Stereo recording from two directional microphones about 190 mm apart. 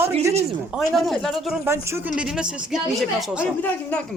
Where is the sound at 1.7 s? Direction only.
15° right (ahead or behind).